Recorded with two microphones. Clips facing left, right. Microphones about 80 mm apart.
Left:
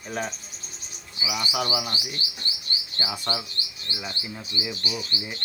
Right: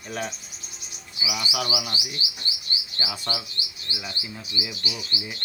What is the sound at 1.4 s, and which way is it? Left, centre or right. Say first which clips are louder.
Speech: left 1 dB; left.